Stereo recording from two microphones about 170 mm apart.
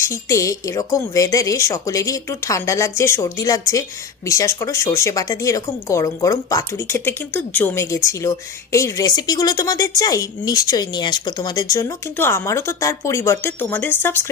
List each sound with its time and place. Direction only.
0.0 s speech: 15° left (ahead or behind)